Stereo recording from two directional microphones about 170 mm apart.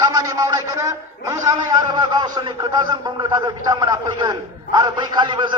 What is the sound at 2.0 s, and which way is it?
A man's voice, 25° right (ahead or behind).